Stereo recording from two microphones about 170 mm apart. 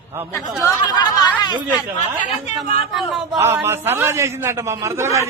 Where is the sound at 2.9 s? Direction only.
Centre (ahead or behind).